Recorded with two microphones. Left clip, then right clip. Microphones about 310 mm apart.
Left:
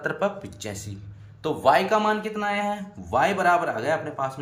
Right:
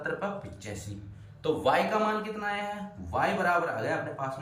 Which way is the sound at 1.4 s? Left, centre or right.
Centre.